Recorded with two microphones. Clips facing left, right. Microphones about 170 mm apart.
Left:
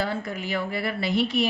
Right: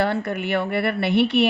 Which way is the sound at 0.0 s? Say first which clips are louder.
Right 6 dB; 65° right (ahead or behind).